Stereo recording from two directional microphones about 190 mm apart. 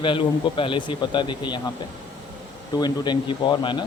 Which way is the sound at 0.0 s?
25° left (ahead or behind).